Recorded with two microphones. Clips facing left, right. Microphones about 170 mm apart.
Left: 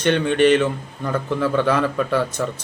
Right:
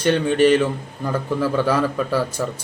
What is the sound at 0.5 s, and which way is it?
A man's voice, 10° right (ahead or behind).